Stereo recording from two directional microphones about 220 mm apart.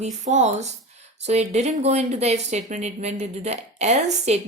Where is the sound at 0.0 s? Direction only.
30° right (ahead or behind).